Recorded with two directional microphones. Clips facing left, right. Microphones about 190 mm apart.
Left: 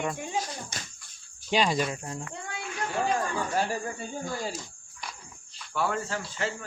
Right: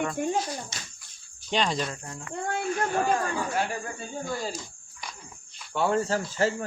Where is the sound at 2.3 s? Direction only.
50° right (ahead or behind).